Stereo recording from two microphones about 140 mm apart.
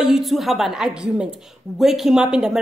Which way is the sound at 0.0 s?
Centre (ahead or behind).